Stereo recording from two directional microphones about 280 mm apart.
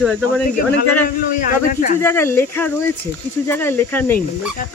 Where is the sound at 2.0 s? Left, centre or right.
Centre.